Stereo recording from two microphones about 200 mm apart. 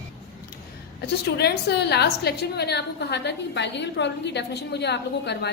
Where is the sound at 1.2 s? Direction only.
55° left (ahead or behind).